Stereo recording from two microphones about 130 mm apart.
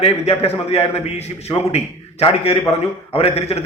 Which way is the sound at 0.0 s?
50° left (ahead or behind).